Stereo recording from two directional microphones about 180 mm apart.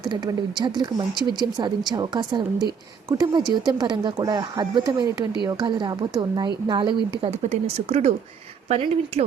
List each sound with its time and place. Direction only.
0.0 s speech: 25° right (ahead or behind)